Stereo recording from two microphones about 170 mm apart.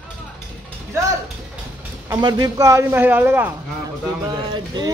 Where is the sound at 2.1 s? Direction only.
20° right (ahead or behind).